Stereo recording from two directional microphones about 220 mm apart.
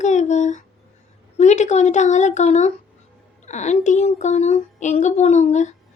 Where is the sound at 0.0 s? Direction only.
30° left (ahead or behind).